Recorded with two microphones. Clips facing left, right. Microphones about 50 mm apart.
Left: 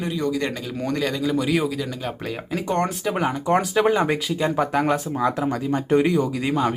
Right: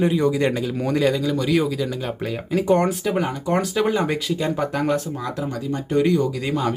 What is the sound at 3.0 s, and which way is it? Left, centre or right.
Speech, centre.